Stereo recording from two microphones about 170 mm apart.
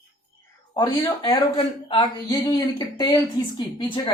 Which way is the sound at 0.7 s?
25° left (ahead or behind).